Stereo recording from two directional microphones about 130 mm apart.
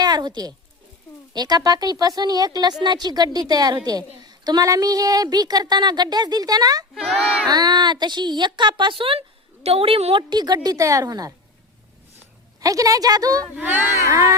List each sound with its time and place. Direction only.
0.0 s a woman's voice: 30° right (ahead or behind)
6.9 s speech: centre (ahead or behind)
7.4 s a woman's voice: 30° right (ahead or behind)
12.5 s a woman's voice: 25° right (ahead or behind)
13.6 s a woman's voice: 15° right (ahead or behind)